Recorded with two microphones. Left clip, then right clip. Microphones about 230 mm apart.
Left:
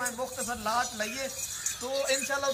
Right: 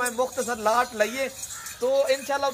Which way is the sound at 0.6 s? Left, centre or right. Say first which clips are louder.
Right 8 dB; right.